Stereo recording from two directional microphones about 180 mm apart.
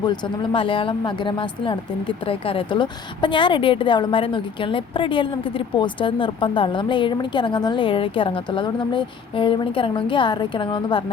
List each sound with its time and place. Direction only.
0.0 s speech: 25° left (ahead or behind)